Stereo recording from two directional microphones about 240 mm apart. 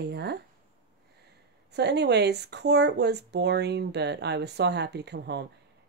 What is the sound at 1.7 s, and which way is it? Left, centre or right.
Speech, right.